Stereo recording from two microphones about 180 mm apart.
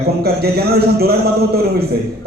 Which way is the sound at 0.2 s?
60° right (ahead or behind).